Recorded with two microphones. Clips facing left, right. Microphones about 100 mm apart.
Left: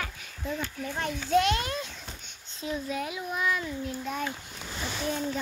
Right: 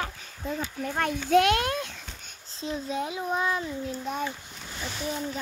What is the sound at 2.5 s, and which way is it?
A child's voice, 30° right (ahead or behind).